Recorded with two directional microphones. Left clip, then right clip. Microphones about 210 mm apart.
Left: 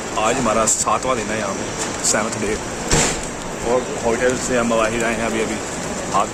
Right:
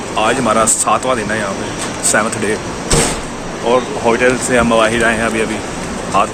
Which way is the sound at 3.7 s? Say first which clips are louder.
Right 6 dB; 10° right (ahead or behind).